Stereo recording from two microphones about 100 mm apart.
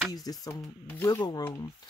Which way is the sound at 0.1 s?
40° left (ahead or behind).